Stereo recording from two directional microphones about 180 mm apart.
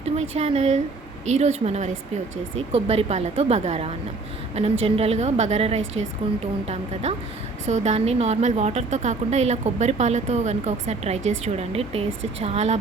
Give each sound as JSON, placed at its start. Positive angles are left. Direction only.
{"t": 0.0, "sound": "a woman's voice", "side_deg": -35}